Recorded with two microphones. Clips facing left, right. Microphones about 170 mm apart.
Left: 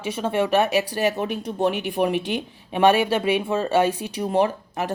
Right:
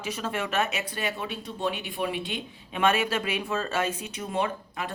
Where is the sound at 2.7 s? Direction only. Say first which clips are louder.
Left 7 dB; 30° left (ahead or behind).